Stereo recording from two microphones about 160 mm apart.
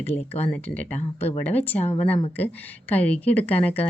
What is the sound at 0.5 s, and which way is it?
Speech, 10° left (ahead or behind).